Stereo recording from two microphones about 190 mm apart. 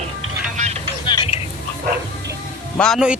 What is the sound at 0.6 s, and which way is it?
Vehicle, 35° right (ahead or behind).